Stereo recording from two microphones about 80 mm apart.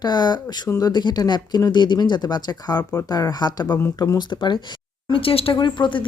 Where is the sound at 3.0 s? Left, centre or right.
Left.